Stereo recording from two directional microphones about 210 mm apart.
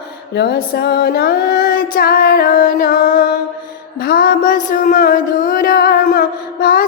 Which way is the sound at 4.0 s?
45° left (ahead or behind).